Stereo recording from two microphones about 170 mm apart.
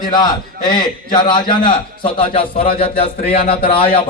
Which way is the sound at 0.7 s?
25° left (ahead or behind).